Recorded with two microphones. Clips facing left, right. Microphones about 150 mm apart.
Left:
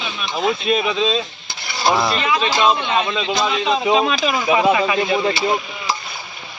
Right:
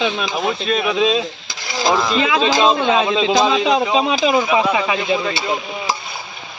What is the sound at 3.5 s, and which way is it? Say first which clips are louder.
Speech: right 3 dB; 90° right.